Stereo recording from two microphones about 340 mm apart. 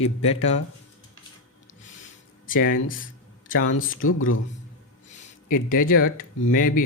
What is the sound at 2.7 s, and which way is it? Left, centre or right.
Speech, left.